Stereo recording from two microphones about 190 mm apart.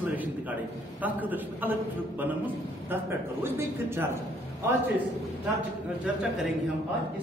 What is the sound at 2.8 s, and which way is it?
A man's voice, 10° right (ahead or behind).